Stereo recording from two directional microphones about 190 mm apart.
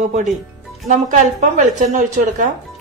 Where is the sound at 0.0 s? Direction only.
40° right (ahead or behind).